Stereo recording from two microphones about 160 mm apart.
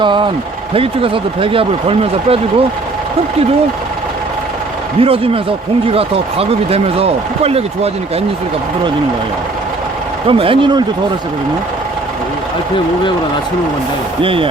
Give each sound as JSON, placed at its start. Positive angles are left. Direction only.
{"t": 0.0, "sound": "speech", "side_deg": -30}
{"t": 4.9, "sound": "speech", "side_deg": -35}
{"t": 10.2, "sound": "speech", "side_deg": -35}
{"t": 14.2, "sound": "speech", "side_deg": -35}